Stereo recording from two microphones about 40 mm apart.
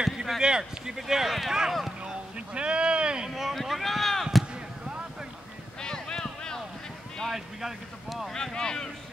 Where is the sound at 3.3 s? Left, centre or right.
Centre.